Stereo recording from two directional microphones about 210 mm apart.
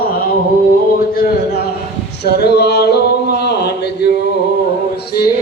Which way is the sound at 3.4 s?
50° left (ahead or behind).